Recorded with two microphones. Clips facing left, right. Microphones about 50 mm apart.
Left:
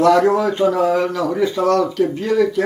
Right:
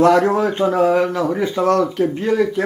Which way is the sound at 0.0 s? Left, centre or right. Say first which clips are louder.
Even; right.